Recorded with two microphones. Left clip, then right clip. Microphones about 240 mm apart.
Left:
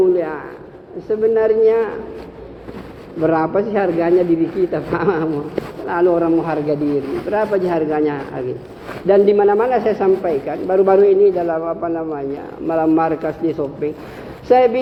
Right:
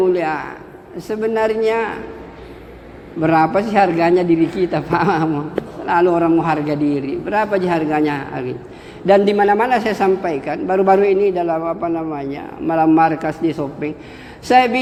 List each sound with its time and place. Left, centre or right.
0.1 s a man's voice: right
3.2 s a man's voice: right